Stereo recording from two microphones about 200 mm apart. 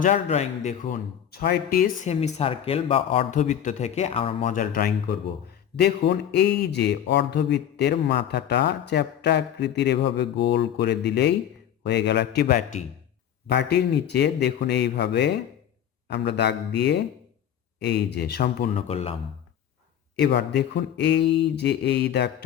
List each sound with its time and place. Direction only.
0.0 s a man's voice: 35° left (ahead or behind)
2.0 s a man's voice: 30° left (ahead or behind)
4.4 s a man's voice: 40° left (ahead or behind)
18.8 s speech: 30° left (ahead or behind)
20.1 s a man's voice: 55° left (ahead or behind)